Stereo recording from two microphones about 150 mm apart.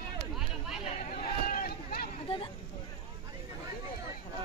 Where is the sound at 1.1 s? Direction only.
65° left (ahead or behind); by 2.1 s 85° left.